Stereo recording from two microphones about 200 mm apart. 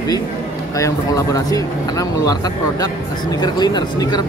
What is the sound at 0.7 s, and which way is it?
Speech, 15° left (ahead or behind).